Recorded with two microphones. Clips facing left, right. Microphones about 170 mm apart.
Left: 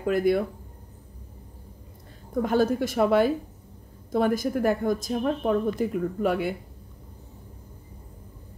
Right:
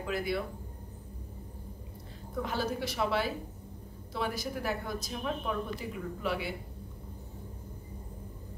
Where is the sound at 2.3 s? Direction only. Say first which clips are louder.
Left 11 dB; 50° left (ahead or behind).